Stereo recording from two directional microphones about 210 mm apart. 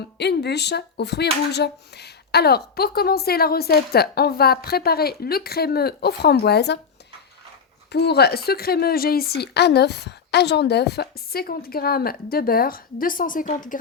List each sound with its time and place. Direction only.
0.2 s speech: 55° left (ahead or behind)
7.9 s speech: 50° left (ahead or behind)